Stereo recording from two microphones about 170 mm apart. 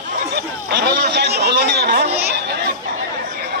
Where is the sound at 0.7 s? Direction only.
75° right (ahead or behind).